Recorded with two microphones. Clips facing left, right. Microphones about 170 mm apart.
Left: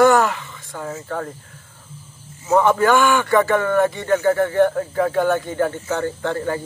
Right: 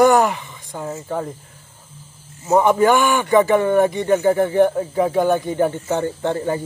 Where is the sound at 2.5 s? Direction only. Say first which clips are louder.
Right 1 dB; 15° right (ahead or behind).